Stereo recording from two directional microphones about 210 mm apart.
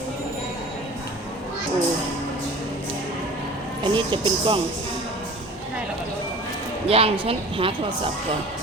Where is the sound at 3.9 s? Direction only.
25° right (ahead or behind).